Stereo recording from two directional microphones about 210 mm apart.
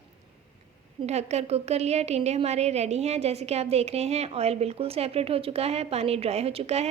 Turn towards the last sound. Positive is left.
turn(degrees=-30)  # may be behind; listen again after turning